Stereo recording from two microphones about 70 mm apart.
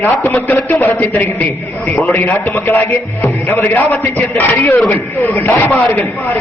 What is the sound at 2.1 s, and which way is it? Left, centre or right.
A man's voice, left.